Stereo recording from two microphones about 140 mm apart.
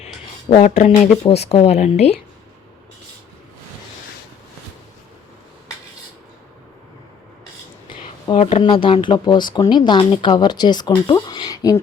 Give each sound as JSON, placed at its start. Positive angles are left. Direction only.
{"t": 0.5, "sound": "speech", "side_deg": 50}
{"t": 7.9, "sound": "a sound", "side_deg": 45}
{"t": 8.6, "sound": "speech", "side_deg": 40}